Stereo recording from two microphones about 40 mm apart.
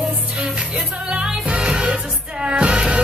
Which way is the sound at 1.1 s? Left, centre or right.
Right.